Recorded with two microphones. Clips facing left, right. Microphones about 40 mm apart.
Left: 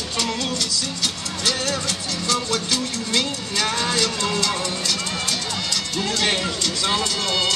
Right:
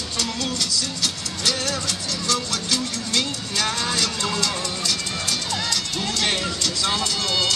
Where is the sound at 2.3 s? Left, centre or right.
Centre.